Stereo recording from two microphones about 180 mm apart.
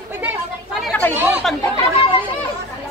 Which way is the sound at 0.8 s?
5° left (ahead or behind).